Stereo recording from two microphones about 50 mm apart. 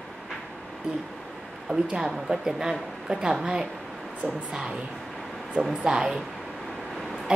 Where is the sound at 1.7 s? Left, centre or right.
Centre.